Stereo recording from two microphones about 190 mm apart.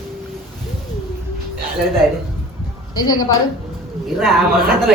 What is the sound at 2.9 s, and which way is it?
Speech, 20° left (ahead or behind).